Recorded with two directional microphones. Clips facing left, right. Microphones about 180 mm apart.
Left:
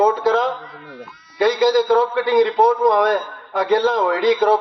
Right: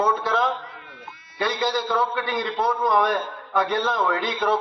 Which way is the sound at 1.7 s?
35° left (ahead or behind).